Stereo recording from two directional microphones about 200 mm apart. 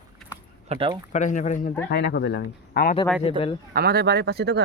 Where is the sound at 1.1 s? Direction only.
40° left (ahead or behind).